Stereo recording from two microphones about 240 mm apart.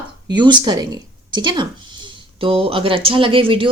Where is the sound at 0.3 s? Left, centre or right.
Centre.